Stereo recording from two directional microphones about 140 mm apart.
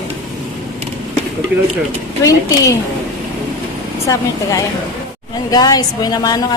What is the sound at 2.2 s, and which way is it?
Speech, 25° left (ahead or behind).